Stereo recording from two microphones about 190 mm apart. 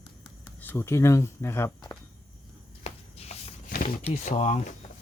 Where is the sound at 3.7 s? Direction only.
45° left (ahead or behind).